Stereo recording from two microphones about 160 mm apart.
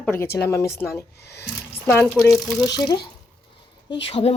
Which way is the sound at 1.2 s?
90° left.